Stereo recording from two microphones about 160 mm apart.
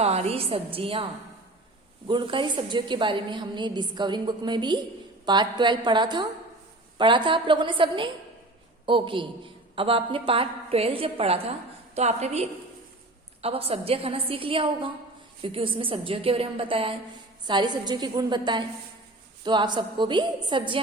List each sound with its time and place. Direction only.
0.0 s a woman's voice: 40° right (ahead or behind)
2.0 s a woman's voice: 30° right (ahead or behind)